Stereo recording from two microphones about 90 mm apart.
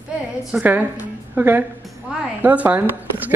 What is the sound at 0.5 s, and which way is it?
A woman's voice, 15° right (ahead or behind).